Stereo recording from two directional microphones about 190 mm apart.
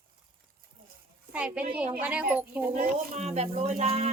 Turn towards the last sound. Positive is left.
turn(degrees=-30)  # may be behind; listen again after turning